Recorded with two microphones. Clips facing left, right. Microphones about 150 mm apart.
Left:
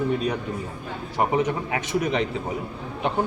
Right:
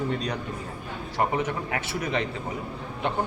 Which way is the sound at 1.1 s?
15° left (ahead or behind).